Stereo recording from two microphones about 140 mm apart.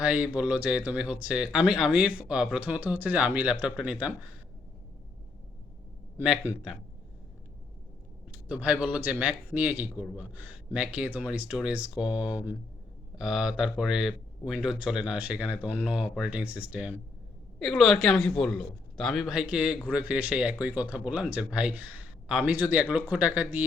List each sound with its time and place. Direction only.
0.0 s speech: 10° right (ahead or behind)
6.5 s a man's voice: 20° left (ahead or behind)
8.4 s speech: 10° right (ahead or behind)